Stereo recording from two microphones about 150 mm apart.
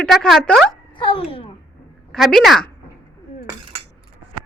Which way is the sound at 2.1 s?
Centre (ahead or behind).